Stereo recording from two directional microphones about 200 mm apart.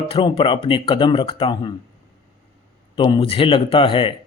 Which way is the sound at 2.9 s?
25° left (ahead or behind).